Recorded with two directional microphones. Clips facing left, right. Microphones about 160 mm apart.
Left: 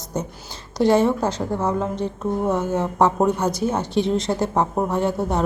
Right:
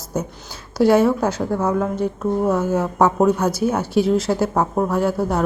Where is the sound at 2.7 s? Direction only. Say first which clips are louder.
Right 2 dB; 5° right (ahead or behind).